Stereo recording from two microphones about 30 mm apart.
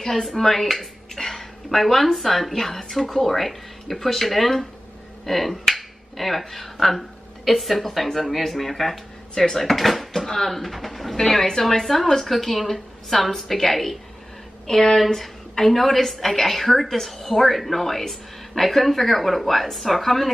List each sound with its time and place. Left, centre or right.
0.2 s a woman's voice: centre
10.2 s speech: centre
11.1 s a woman's voice: centre